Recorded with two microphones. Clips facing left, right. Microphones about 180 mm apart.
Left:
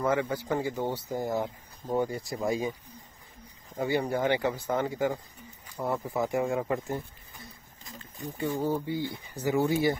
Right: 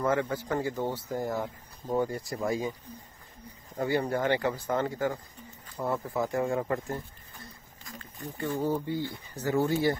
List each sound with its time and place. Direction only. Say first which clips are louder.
0.0 s speech: even; 10° left (ahead or behind)
3.7 s speech: even; 15° left (ahead or behind)